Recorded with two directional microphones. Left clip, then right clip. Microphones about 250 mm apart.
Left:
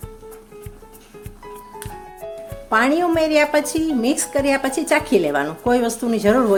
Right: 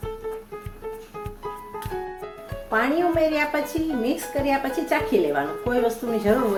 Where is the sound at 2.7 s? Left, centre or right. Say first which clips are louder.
Left 5 dB; left.